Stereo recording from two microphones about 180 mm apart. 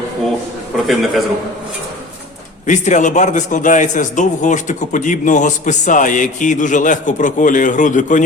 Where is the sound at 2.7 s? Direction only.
40° left (ahead or behind).